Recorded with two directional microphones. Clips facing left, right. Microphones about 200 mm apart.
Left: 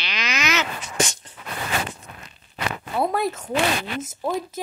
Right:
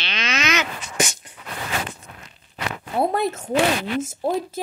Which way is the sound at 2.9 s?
25° right (ahead or behind).